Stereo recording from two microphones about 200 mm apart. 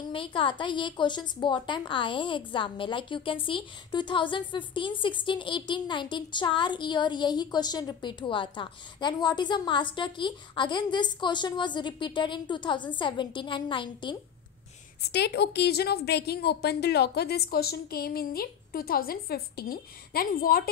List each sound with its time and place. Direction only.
0.1 s a woman's voice: 25° left (ahead or behind)
15.0 s a woman's voice: 55° left (ahead or behind)